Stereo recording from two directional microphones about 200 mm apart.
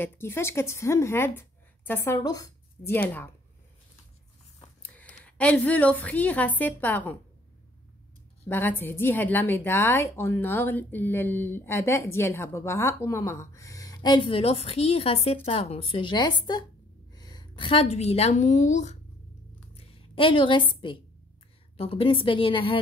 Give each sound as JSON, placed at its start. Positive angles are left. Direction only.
{"t": 0.0, "sound": "a woman's voice", "side_deg": 10}
{"t": 4.8, "sound": "a woman's voice", "side_deg": 5}
{"t": 8.5, "sound": "a woman's voice", "side_deg": 10}
{"t": 19.7, "sound": "a sound", "side_deg": 30}
{"t": 21.7, "sound": "speech", "side_deg": 30}